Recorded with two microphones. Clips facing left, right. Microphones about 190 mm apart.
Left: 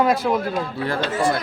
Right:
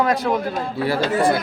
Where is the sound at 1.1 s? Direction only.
55° right (ahead or behind).